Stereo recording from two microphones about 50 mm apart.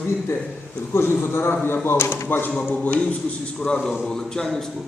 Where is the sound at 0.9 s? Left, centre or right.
Left.